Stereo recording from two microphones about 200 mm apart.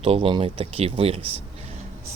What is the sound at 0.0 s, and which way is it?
Speech, 30° right (ahead or behind).